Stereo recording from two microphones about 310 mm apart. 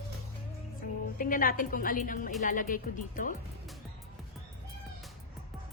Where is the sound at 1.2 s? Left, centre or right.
Left.